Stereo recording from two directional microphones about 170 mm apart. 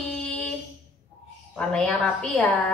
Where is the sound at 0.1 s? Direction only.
5° left (ahead or behind).